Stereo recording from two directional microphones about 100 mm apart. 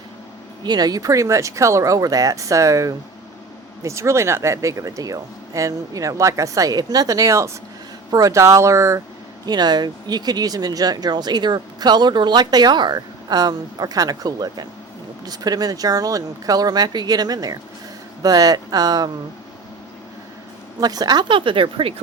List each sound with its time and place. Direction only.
0.6 s speech: 45° right (ahead or behind)
9.5 s speech: 45° right (ahead or behind)
20.8 s speech: 40° right (ahead or behind); by 21.9 s 60° right (ahead or behind)